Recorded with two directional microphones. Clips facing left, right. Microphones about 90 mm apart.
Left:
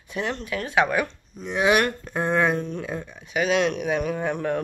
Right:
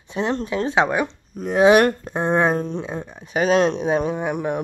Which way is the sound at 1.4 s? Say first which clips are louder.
Right 8 dB; 45° right (ahead or behind).